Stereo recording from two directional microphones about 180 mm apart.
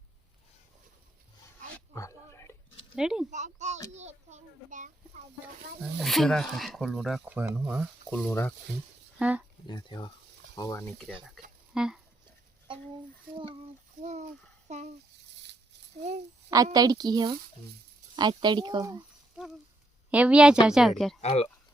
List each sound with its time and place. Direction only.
1.9 s a sound: 15° left (ahead or behind)
2.9 s speech: 5° right (ahead or behind)
3.2 s a sound: 40° right (ahead or behind)
6.0 s speech: centre (ahead or behind)
8.1 s speech: 10° left (ahead or behind)
9.1 s speech: 5° right (ahead or behind)
9.6 s stir: 25° left (ahead or behind)
11.7 s speech: 5° right (ahead or behind)
13.3 s speech: 30° right (ahead or behind)
14.0 s speech: 40° right (ahead or behind)
16.7 s speech: 20° right (ahead or behind)
20.1 s speech: 5° right (ahead or behind)
21.2 s speech: 35° left (ahead or behind)